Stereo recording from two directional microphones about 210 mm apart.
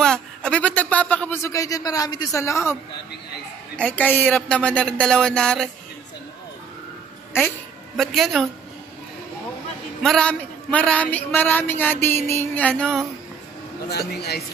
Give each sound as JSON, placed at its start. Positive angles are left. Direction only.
{"t": 0.0, "sound": "speech", "side_deg": 5}
{"t": 8.0, "sound": "speech", "side_deg": 0}
{"t": 10.0, "sound": "a man's voice", "side_deg": 5}
{"t": 13.8, "sound": "speech", "side_deg": 50}